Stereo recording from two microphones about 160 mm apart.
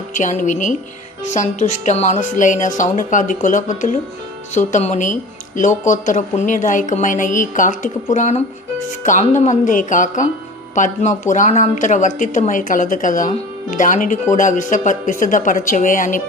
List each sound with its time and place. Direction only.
0.1 s speech: 50° left (ahead or behind)